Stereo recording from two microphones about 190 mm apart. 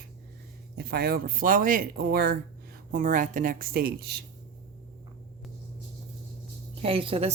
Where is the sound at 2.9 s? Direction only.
45° right (ahead or behind).